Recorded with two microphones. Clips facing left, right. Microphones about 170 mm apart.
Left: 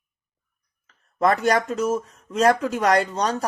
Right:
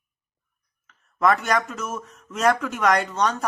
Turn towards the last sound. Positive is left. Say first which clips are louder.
# left 2 dB
turn(degrees=35)  # may be behind; listen again after turning